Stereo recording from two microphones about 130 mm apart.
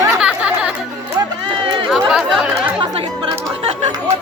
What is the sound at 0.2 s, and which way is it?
Chatter, 10° right (ahead or behind).